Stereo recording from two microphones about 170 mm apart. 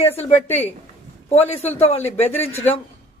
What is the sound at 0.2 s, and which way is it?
Speech, 40° left (ahead or behind).